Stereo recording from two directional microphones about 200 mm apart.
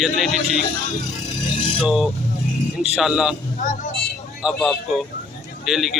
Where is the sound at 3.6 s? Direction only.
40° left (ahead or behind).